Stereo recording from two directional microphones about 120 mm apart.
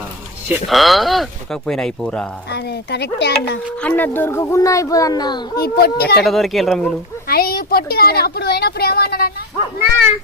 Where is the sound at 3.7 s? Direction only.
15° left (ahead or behind); by 5.4 s 35° left (ahead or behind).